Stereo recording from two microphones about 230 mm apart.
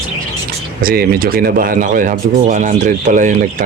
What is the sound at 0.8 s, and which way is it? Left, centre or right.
Speech, right.